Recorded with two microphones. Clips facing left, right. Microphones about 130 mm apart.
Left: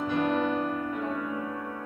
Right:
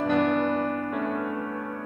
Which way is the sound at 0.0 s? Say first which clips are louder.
Right 4 dB; 70° right (ahead or behind).